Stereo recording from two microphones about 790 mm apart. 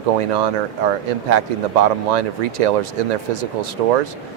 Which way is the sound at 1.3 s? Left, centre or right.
Right.